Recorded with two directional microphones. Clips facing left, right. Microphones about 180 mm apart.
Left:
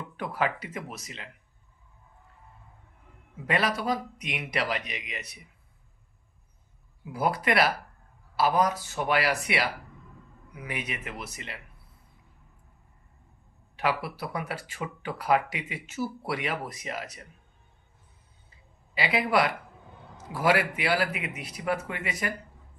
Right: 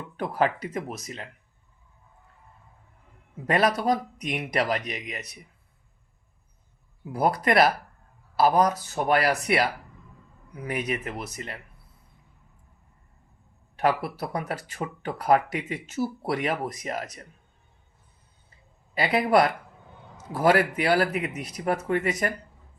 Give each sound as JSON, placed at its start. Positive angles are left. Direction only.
{"t": 0.2, "sound": "speech", "side_deg": -40}
{"t": 3.4, "sound": "speech", "side_deg": -45}
{"t": 7.1, "sound": "speech", "side_deg": -40}
{"t": 13.7, "sound": "speech", "side_deg": -45}
{"t": 18.9, "sound": "speech", "side_deg": -45}